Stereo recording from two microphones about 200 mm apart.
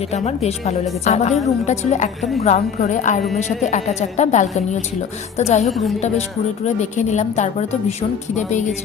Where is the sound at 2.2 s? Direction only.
Centre (ahead or behind).